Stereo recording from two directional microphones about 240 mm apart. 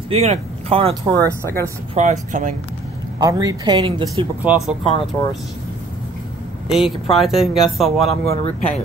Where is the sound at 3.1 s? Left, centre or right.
Centre.